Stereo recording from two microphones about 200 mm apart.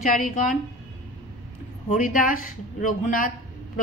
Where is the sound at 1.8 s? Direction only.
40° left (ahead or behind).